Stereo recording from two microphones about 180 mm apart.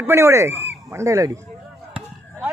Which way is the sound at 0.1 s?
15° right (ahead or behind).